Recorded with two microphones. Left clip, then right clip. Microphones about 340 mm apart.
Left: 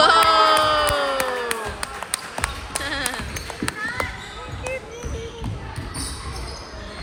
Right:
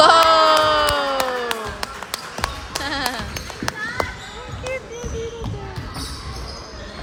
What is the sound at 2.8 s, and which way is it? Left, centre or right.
Music, centre.